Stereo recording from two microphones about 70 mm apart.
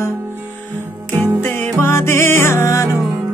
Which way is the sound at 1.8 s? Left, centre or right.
Left.